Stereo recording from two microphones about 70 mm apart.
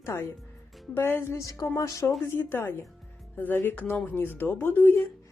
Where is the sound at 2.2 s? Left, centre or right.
Left.